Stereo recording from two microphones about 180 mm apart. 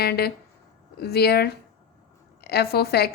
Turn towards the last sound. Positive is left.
turn(degrees=60)  # may be behind; listen again after turning